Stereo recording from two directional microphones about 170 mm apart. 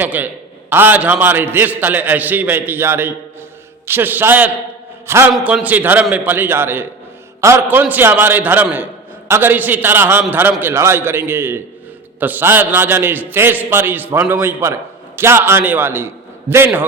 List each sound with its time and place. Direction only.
0.0 s a man's voice: 10° right (ahead or behind)
5.3 s a man's voice: 5° right (ahead or behind)